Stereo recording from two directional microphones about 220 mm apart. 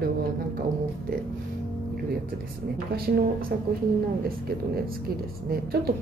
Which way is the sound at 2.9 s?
45° right (ahead or behind).